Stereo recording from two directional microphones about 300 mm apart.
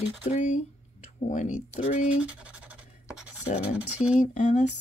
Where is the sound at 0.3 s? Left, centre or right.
Left.